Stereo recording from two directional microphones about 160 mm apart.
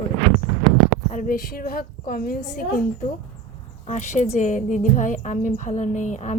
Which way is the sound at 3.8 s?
45° left (ahead or behind).